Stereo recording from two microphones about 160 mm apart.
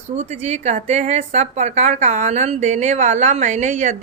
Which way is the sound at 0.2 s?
45° right (ahead or behind).